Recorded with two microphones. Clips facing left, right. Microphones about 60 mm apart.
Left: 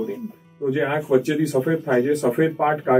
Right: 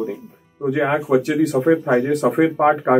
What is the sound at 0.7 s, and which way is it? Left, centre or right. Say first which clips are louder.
A man's voice: right 2 dB; right.